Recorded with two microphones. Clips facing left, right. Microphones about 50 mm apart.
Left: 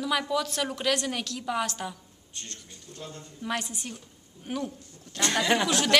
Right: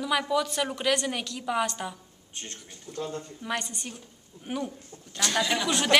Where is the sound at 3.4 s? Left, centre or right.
Centre.